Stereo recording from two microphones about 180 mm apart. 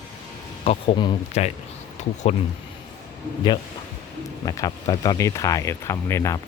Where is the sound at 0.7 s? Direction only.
30° left (ahead or behind).